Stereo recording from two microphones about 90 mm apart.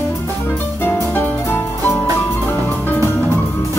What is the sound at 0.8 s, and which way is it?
Music, 25° left (ahead or behind).